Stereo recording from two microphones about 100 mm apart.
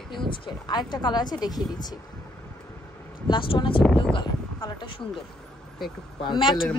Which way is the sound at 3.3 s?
55° left (ahead or behind).